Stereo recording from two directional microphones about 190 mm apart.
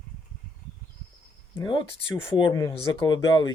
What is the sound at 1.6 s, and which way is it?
Speech, 25° left (ahead or behind).